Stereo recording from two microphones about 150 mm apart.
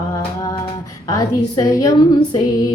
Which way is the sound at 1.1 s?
25° left (ahead or behind).